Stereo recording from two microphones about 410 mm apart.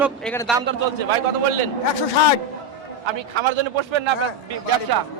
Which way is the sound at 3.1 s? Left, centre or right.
Right.